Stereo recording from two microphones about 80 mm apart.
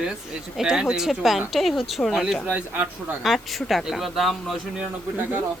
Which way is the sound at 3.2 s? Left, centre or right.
Centre.